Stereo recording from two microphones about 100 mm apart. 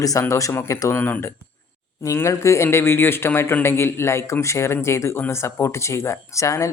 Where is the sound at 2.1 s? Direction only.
30° left (ahead or behind).